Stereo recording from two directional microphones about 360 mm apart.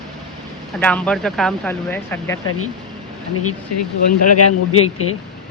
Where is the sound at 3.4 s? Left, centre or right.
Left.